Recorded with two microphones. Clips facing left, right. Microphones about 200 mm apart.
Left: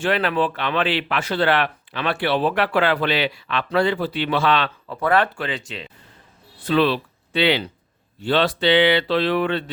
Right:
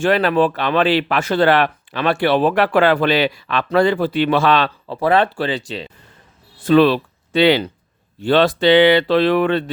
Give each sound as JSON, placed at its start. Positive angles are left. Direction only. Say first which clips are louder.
{"t": 0.0, "sound": "speech", "louder": "right 5 dB", "side_deg": -40}
{"t": 4.9, "sound": "speech", "louder": "right 3 dB", "side_deg": -25}
{"t": 6.7, "sound": "speech", "louder": "right 6 dB", "side_deg": -45}